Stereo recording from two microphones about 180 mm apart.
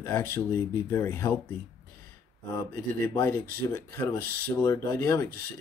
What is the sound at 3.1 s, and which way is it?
Speech, 15° left (ahead or behind).